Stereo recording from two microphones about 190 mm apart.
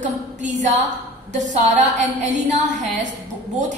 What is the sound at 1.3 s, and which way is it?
A woman's voice, 40° right (ahead or behind).